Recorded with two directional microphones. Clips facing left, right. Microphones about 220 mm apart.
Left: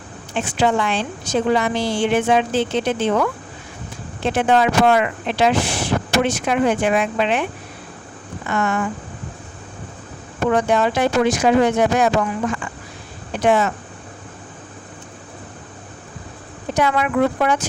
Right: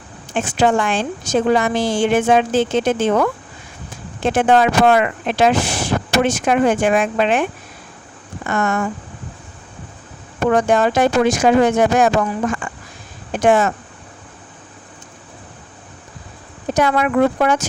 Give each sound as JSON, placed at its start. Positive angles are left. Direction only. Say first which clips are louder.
{"t": 0.3, "sound": "speech", "louder": "right 2 dB", "side_deg": -45}
{"t": 8.4, "sound": "speech", "louder": "right 2 dB", "side_deg": -45}
{"t": 10.5, "sound": "speech", "louder": "right 3 dB", "side_deg": -45}
{"t": 16.7, "sound": "speech", "louder": "right 2 dB", "side_deg": -45}